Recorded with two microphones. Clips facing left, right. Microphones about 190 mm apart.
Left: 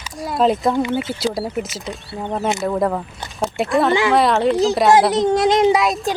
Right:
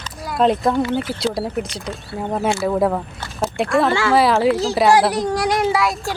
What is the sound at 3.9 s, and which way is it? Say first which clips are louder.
Speech: left 1 dB; 20° left (ahead or behind).